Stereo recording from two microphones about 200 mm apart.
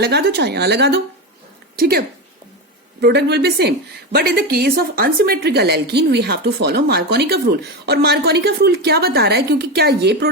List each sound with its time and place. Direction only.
0.0 s a woman's voice: 55° right (ahead or behind)